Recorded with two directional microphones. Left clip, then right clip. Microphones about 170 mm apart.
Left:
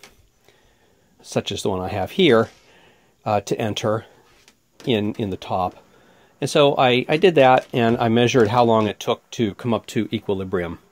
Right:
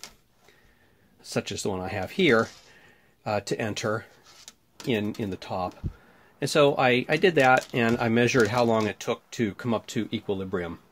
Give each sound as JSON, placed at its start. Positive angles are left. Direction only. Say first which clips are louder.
{"t": 1.2, "sound": "speech", "louder": "left 6 dB", "side_deg": 30}